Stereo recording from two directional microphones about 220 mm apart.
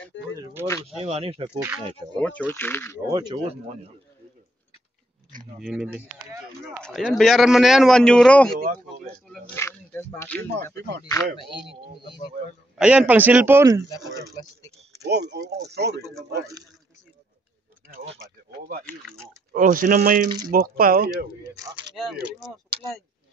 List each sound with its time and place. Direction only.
0.3 s a sound: 10° right (ahead or behind)
0.8 s speech: 30° right (ahead or behind)
2.1 s speech: 5° left (ahead or behind)
3.1 s speech: 20° right (ahead or behind)
5.6 s a man's voice: 5° right (ahead or behind)
8.5 s speech: 40° right (ahead or behind)
9.0 s speech: 5° left (ahead or behind)
12.7 s speech: 5° right (ahead or behind)
15.0 s speech: 50° right (ahead or behind)
17.8 s speech: 40° right (ahead or behind)
19.5 s speech: 40° right (ahead or behind)
21.5 s speech: 15° right (ahead or behind)
21.9 s a man's voice: centre (ahead or behind)